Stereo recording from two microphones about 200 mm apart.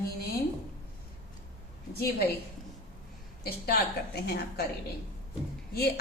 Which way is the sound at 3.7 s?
55° left (ahead or behind).